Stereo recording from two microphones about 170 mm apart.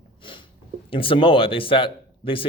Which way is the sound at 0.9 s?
30° left (ahead or behind).